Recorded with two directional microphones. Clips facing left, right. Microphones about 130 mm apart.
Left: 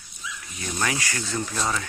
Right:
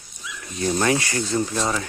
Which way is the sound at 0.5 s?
35° right (ahead or behind).